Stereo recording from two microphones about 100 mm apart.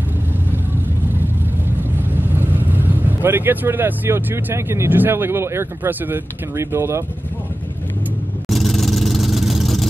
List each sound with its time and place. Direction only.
2.1 s speech: 20° right (ahead or behind)
8.5 s vehicle: centre (ahead or behind)